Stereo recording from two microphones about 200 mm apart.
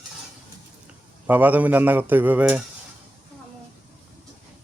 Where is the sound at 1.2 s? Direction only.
10° right (ahead or behind).